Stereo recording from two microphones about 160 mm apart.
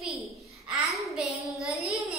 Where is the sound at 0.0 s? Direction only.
Centre (ahead or behind).